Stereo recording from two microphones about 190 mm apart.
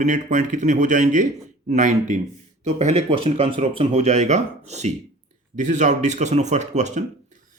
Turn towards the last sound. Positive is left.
turn(degrees=-35)  # may be behind; listen again after turning